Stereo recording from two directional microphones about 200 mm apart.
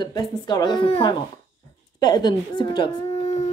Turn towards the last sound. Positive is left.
turn(degrees=25)  # may be behind; listen again after turning